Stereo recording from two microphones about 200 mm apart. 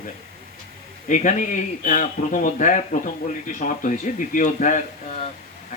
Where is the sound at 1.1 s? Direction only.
40° left (ahead or behind).